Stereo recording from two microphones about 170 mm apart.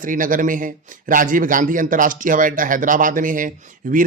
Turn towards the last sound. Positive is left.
turn(degrees=-50)  # may be behind; listen again after turning